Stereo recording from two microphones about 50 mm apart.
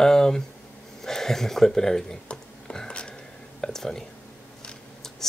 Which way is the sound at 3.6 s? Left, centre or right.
Centre.